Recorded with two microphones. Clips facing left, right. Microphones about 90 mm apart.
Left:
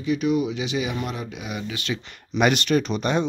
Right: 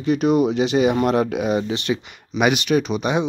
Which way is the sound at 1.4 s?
35° right (ahead or behind).